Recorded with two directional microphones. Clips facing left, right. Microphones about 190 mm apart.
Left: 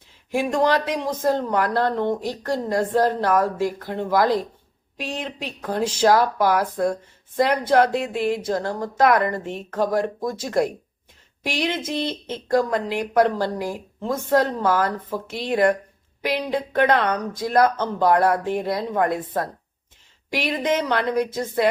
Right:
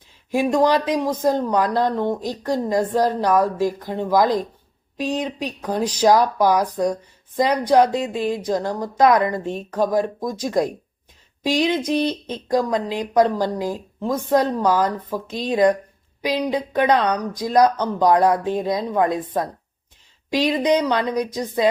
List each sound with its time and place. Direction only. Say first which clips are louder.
0.3 s speech: right 3 dB; 15° right (ahead or behind)